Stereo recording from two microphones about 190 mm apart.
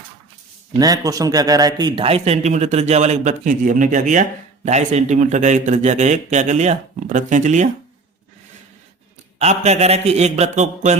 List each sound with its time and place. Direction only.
0.8 s speech: 20° right (ahead or behind); by 7.7 s 40° right (ahead or behind)
9.4 s speech: 35° right (ahead or behind)